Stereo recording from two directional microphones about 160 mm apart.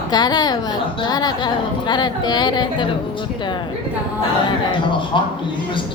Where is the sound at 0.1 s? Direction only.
25° left (ahead or behind).